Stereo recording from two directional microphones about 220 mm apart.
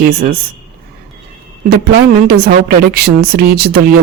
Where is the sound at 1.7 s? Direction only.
45° right (ahead or behind).